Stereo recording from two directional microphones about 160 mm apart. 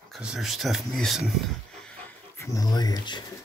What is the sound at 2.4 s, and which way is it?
Speech, 20° left (ahead or behind).